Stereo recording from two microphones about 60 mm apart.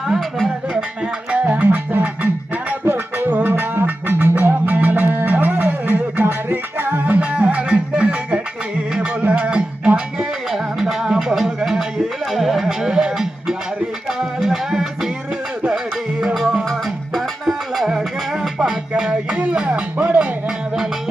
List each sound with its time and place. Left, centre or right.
0.1 s speech: centre
1.3 s music: right
2.8 s music: right
3.2 s music: right
7.0 s music: right
10.5 s music: centre
16.2 s music: centre; by 20.2 s right